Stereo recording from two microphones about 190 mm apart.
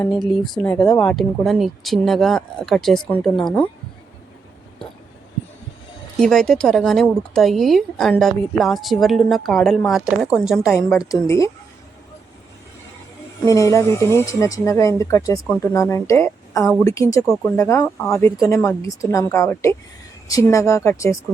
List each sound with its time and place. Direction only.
0.1 s a woman's voice: centre (ahead or behind)
6.1 s a woman's voice: 5° left (ahead or behind)
11.1 s speech: 15° left (ahead or behind)
13.4 s speech: 15° left (ahead or behind)